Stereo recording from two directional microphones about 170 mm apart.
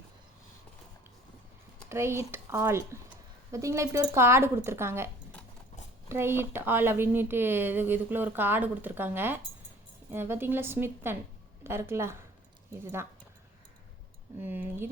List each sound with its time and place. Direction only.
1.9 s a woman's voice: 15° right (ahead or behind)
14.4 s a woman's voice: 10° right (ahead or behind)